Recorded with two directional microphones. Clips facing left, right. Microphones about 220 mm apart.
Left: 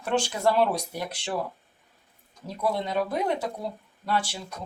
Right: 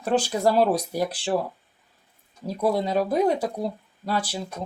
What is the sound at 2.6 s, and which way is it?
Speech, 40° right (ahead or behind).